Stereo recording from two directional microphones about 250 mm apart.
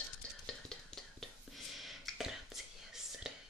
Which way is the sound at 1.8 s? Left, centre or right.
Centre.